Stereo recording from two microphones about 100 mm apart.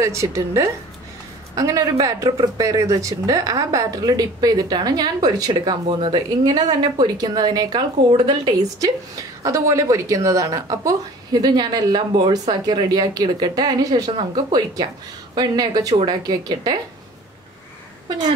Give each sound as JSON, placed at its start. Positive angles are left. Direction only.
{"t": 0.0, "sound": "a woman's voice", "side_deg": -30}
{"t": 6.4, "sound": "speech", "side_deg": -40}
{"t": 8.8, "sound": "speech", "side_deg": -35}